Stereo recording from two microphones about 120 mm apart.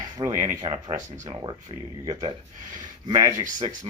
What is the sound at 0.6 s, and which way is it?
Speech, 45° right (ahead or behind).